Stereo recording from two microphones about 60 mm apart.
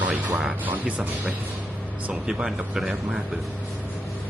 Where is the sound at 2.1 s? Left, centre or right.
Centre.